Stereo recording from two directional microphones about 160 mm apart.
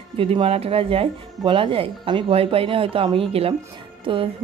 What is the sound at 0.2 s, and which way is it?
A woman's voice, 35° right (ahead or behind).